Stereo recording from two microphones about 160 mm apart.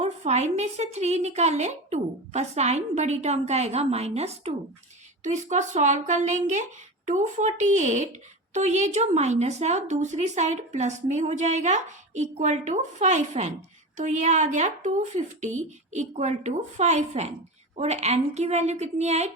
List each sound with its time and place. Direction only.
0.0 s speech: 45° right (ahead or behind)